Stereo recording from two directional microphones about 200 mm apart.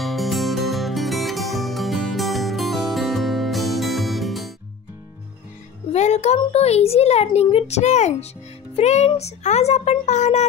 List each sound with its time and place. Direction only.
0.0 s music: centre (ahead or behind)
5.9 s a child's voice: 35° left (ahead or behind)